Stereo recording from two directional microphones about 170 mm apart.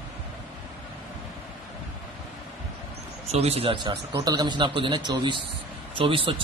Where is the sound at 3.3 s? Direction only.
40° right (ahead or behind).